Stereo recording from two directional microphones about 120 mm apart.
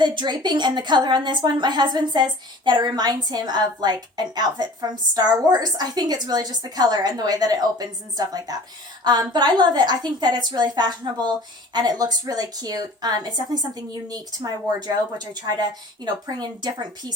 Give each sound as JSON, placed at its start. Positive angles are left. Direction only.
{"t": 0.0, "sound": "a woman's voice", "side_deg": -40}